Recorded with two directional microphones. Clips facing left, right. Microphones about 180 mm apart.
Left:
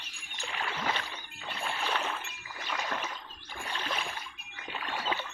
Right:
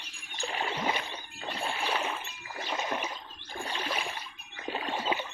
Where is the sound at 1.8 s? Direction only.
10° right (ahead or behind).